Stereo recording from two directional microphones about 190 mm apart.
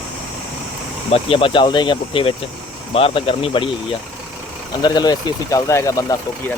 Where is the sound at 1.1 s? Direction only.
30° left (ahead or behind).